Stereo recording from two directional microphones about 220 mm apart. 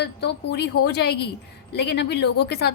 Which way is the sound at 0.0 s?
50° left (ahead or behind).